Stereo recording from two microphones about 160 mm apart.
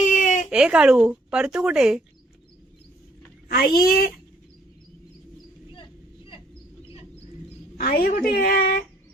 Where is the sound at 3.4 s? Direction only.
70° left (ahead or behind).